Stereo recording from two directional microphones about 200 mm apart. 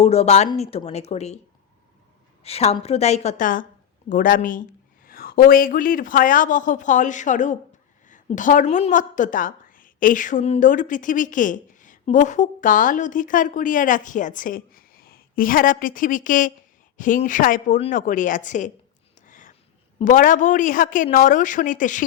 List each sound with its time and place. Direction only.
0.0 s speech: 30° left (ahead or behind)
2.4 s a woman's voice: 30° left (ahead or behind)
19.2 s a sound: 40° left (ahead or behind)
20.1 s speech: 40° left (ahead or behind)